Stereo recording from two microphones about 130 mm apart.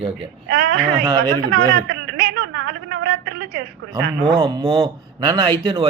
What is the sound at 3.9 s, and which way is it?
Speech, 30° right (ahead or behind).